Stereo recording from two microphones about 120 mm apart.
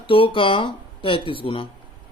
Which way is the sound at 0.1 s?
45° left (ahead or behind).